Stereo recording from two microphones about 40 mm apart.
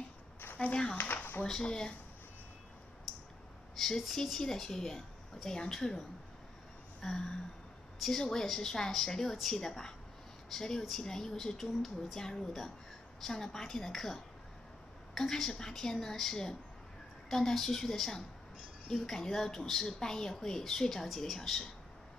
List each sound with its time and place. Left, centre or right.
0.6 s speech: left
0.9 s a sound: left
1.6 s speech: left
4.0 s a woman's voice: centre
7.0 s a sound: centre
8.2 s a woman's voice: centre